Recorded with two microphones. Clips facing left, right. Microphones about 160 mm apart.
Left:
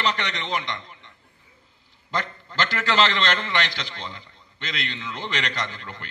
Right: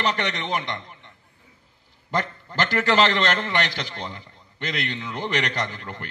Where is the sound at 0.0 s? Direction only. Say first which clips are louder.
Right 2 dB; 45° right (ahead or behind).